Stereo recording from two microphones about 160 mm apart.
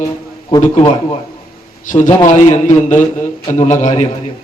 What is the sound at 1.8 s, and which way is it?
A man's voice, 55° left (ahead or behind).